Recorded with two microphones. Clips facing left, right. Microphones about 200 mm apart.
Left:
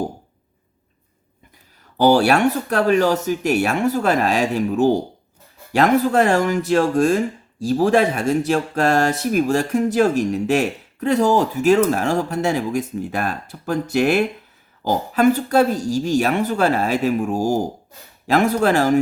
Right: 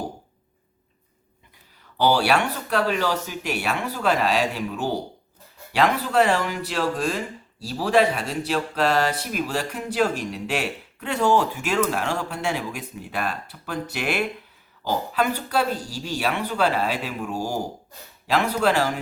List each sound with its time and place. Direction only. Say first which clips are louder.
2.0 s speech: left 6 dB; 45° left (ahead or behind)